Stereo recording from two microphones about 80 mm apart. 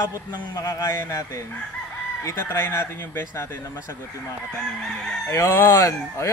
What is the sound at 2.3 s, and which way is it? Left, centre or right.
Speech, left.